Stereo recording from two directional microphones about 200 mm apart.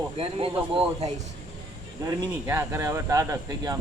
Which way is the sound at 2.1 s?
15° right (ahead or behind).